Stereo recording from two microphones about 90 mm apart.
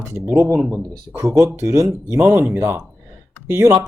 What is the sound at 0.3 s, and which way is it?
Speech, 30° right (ahead or behind).